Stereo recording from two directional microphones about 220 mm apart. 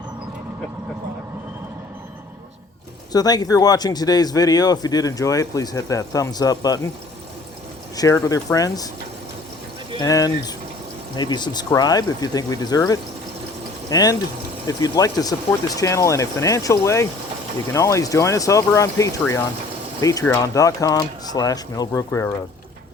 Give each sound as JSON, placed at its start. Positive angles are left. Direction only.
{"t": 3.1, "sound": "speech", "side_deg": 15}
{"t": 7.9, "sound": "speech", "side_deg": 15}
{"t": 10.0, "sound": "speech", "side_deg": 15}